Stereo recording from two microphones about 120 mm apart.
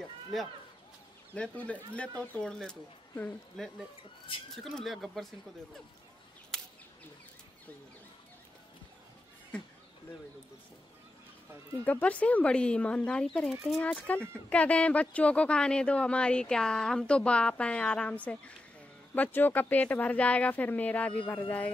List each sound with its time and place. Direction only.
0.3 s speech: centre (ahead or behind)
1.3 s speech: 10° left (ahead or behind)
4.7 s speech: centre (ahead or behind)
11.8 s speech: 10° left (ahead or behind)
13.7 s speech: 15° left (ahead or behind)